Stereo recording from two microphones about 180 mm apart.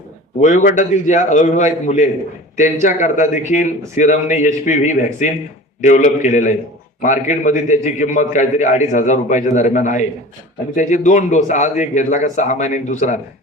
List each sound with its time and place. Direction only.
0.3 s a man's voice: 40° left (ahead or behind)